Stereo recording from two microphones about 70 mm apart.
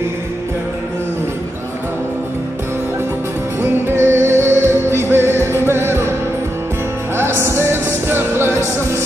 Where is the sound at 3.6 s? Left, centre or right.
Right.